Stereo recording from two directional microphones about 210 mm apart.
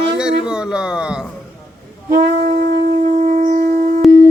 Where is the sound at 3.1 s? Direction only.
35° right (ahead or behind).